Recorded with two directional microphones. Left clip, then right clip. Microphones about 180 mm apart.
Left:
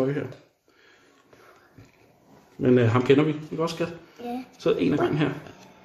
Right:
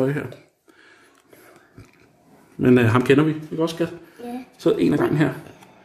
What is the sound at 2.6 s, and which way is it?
Speech, 45° right (ahead or behind).